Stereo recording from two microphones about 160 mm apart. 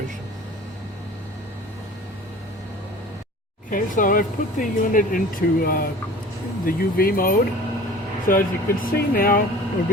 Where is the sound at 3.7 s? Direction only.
55° left (ahead or behind).